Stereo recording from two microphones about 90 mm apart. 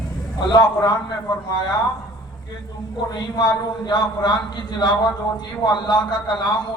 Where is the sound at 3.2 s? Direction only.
50° left (ahead or behind).